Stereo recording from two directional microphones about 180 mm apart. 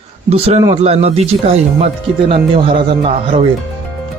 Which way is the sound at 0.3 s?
35° right (ahead or behind).